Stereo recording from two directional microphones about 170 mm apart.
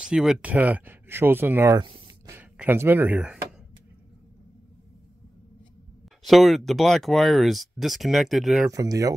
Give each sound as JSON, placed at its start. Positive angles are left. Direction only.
{"t": 0.0, "sound": "speech", "side_deg": -5}
{"t": 2.0, "sound": "a sound", "side_deg": -20}
{"t": 2.5, "sound": "speech", "side_deg": -10}
{"t": 6.2, "sound": "speech", "side_deg": 0}
{"t": 8.6, "sound": "speech", "side_deg": -20}